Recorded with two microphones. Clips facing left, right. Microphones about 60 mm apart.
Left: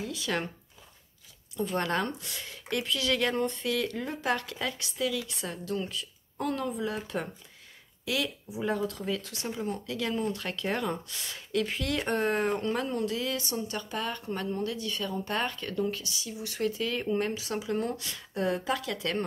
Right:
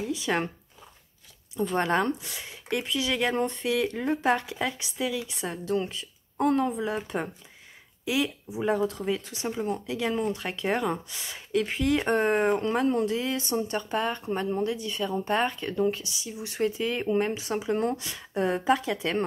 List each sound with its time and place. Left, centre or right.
0.0 s speech: right
1.8 s speech: right
8.0 s speech: centre